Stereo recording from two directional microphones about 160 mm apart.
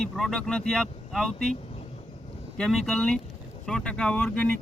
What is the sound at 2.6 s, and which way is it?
Speech, centre (ahead or behind).